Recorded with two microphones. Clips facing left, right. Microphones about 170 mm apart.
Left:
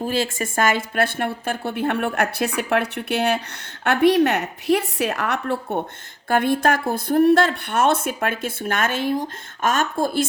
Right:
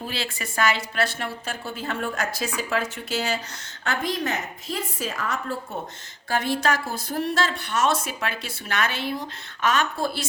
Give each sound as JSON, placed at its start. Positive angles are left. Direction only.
{"t": 0.0, "sound": "a woman's voice", "side_deg": 45}
{"t": 6.2, "sound": "speech", "side_deg": 55}